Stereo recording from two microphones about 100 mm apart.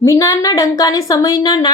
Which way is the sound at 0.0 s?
30° left (ahead or behind).